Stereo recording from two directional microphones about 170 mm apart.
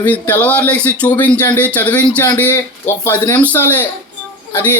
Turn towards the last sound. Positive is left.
turn(degrees=15)  # may be behind; listen again after turning